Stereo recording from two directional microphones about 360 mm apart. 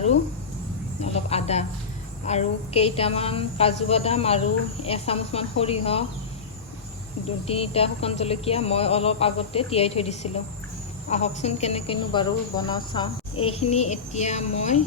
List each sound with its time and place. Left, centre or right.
0.9 s a sound: centre
2.2 s a woman's voice: centre
7.3 s a woman's voice: centre